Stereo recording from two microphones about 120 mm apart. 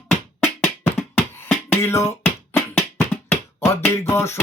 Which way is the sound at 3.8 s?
20° left (ahead or behind).